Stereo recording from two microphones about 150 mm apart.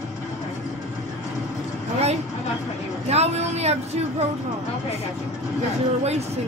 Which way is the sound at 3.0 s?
45° right (ahead or behind).